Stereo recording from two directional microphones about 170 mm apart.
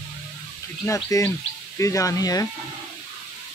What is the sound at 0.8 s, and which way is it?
Speech, 15° left (ahead or behind).